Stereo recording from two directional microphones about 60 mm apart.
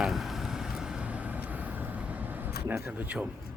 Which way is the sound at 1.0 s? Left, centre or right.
Right.